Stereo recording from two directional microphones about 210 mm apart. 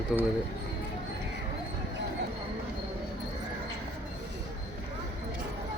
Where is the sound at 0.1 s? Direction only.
Centre (ahead or behind).